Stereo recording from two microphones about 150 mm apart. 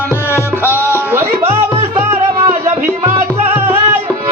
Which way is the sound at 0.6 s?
15° left (ahead or behind).